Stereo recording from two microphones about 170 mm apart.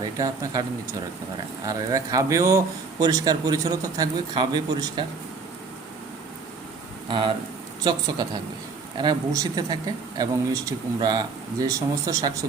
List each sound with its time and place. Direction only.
0.0 s speech: 20° right (ahead or behind)
1.6 s a man's voice: 20° right (ahead or behind)
7.1 s a man's voice: 30° right (ahead or behind)